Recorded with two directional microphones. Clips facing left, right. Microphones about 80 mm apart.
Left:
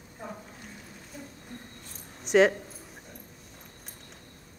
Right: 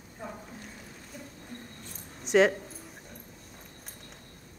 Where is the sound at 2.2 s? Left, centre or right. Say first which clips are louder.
Left 1 dB; centre.